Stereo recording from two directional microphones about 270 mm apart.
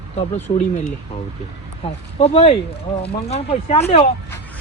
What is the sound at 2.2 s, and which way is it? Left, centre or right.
Speech, left.